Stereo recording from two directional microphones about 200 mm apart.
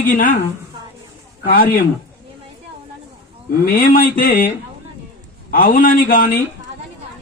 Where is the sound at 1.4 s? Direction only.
45° left (ahead or behind).